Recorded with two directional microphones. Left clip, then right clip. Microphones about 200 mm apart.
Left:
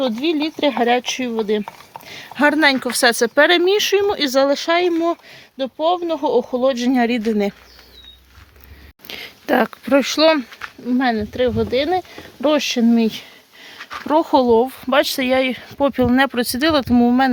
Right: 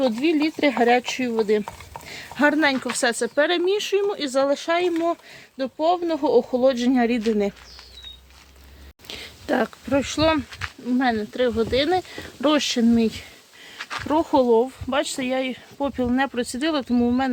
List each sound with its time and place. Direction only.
0.2 s speech: centre (ahead or behind)
0.8 s speech: 30° left (ahead or behind); by 5.1 s 45° left (ahead or behind)
5.5 s speech: 35° left (ahead or behind)
9.0 s speech: 25° left (ahead or behind)
12.9 s speech: 40° left (ahead or behind)
13.7 s a sound: 10° left (ahead or behind)
14.1 s speech: 50° left (ahead or behind)